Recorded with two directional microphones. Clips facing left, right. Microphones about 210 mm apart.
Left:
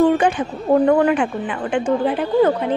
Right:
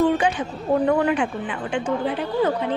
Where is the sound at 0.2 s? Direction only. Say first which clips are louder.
Left 4 dB; 50° left (ahead or behind).